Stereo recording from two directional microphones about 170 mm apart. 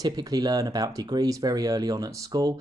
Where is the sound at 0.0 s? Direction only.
20° right (ahead or behind).